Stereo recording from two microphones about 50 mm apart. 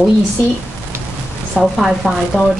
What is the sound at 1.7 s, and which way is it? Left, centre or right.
Speech, centre.